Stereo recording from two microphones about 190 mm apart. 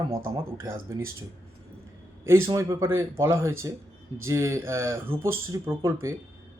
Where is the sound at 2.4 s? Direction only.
15° right (ahead or behind).